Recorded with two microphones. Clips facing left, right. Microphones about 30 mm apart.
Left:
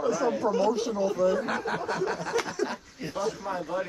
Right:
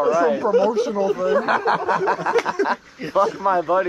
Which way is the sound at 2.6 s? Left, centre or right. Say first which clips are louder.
Right 10 dB; right.